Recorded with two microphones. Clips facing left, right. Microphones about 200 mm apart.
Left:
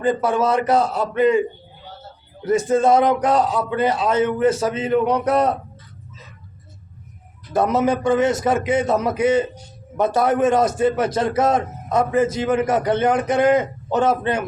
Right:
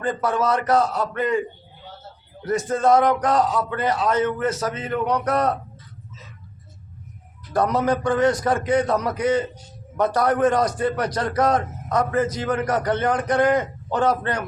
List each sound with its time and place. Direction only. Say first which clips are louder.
0.0 s a man's voice: left 4 dB; 25° left (ahead or behind)
7.5 s a man's voice: left 2 dB; 25° left (ahead or behind)